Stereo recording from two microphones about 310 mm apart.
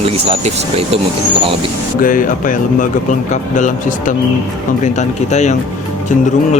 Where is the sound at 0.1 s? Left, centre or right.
Centre.